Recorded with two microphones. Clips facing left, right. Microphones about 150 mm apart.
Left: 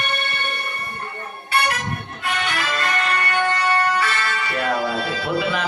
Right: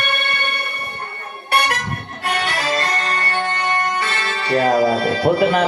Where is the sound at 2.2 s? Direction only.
45° right (ahead or behind).